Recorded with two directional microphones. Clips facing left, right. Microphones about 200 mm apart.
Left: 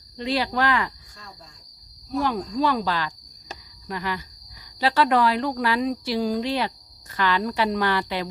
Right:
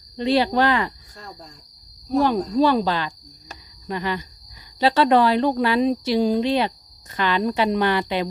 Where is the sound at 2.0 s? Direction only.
30° right (ahead or behind).